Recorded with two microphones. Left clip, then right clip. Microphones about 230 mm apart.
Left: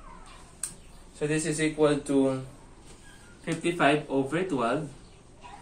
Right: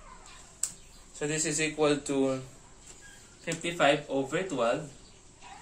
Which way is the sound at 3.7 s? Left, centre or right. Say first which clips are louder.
Left 1 dB; centre.